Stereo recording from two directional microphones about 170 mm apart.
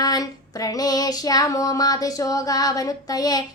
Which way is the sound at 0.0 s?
20° left (ahead or behind).